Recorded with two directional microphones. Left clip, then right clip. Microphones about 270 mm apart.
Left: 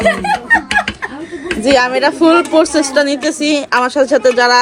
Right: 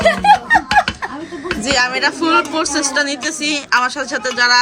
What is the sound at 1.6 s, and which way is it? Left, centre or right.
A woman's voice, centre.